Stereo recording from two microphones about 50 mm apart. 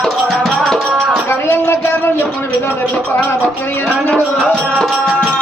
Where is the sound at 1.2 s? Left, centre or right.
Left.